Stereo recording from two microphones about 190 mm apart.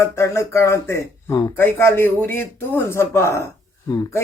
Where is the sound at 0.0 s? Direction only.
15° left (ahead or behind).